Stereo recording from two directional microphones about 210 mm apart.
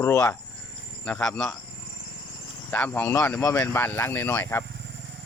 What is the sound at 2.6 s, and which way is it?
Speech, 10° left (ahead or behind).